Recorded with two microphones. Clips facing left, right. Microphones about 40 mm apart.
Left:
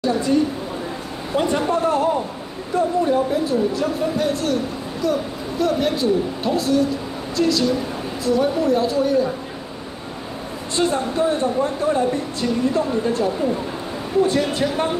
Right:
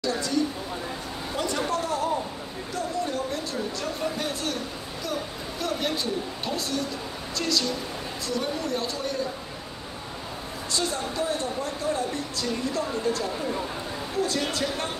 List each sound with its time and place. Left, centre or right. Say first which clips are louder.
0.0 s speech: left 7 dB; left
3.3 s speech: left 11 dB; centre
5.6 s speech: left 9 dB; centre
10.8 s speech: left 10 dB; left